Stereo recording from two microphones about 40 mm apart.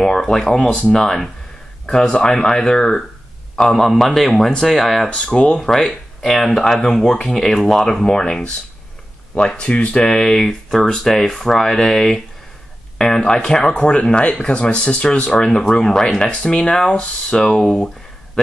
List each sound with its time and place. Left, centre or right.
0.0 s speech: centre
0.7 s speech: left
1.0 s a man's voice: centre
1.9 s speech: centre
3.7 s a man's voice: centre
5.1 s speech: left
5.8 s speech: centre
9.3 s speech: left
10.0 s speech: centre
12.9 s a sound: centre
13.3 s speech: centre
17.7 s a sound: centre